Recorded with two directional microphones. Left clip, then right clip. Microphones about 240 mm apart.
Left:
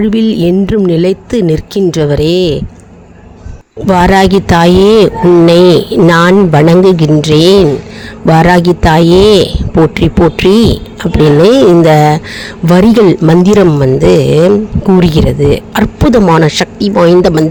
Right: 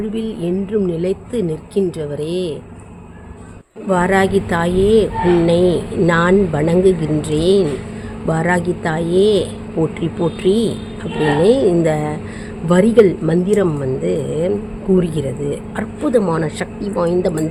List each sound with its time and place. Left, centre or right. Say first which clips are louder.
0.0 s a man's voice: left 12 dB; left
3.8 s a man's voice: left 8 dB; left